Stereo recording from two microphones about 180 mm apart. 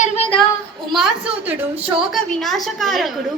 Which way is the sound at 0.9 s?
5° right (ahead or behind).